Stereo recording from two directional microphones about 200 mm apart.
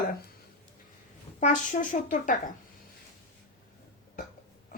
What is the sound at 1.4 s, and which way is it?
A woman's voice, 40° left (ahead or behind).